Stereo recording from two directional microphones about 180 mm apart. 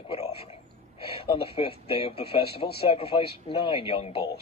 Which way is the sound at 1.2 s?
30° left (ahead or behind).